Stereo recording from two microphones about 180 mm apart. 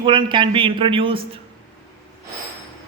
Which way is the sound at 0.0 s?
25° right (ahead or behind).